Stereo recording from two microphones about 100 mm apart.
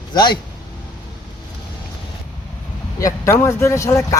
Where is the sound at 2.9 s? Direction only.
30° left (ahead or behind).